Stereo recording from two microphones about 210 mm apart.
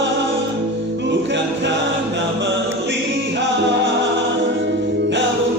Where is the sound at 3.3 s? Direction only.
60° right (ahead or behind).